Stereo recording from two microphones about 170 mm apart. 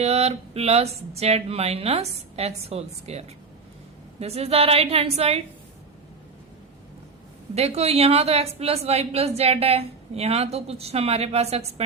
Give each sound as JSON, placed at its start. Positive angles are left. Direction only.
{"t": 0.0, "sound": "a woman's voice", "side_deg": -40}
{"t": 7.5, "sound": "a woman's voice", "side_deg": -40}